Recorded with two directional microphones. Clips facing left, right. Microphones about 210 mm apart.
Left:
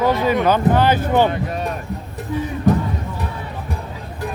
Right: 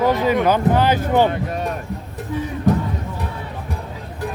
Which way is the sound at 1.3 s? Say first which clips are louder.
Even; 50° right (ahead or behind).